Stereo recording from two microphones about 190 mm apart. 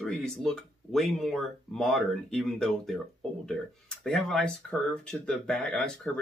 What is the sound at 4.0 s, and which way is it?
Speech, centre (ahead or behind).